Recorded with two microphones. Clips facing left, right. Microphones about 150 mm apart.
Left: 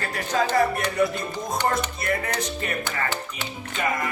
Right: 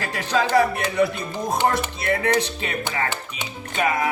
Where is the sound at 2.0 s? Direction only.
65° right (ahead or behind).